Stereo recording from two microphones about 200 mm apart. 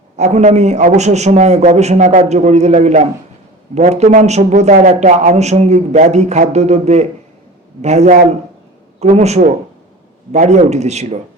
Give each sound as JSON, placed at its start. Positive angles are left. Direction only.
{"t": 0.2, "sound": "a man's voice", "side_deg": -35}